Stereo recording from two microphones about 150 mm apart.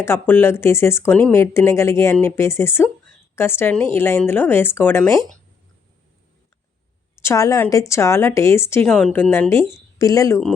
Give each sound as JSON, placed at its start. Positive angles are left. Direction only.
{"t": 0.0, "sound": "speech", "side_deg": 15}
{"t": 7.2, "sound": "speech", "side_deg": 20}
{"t": 8.9, "sound": "speech", "side_deg": 5}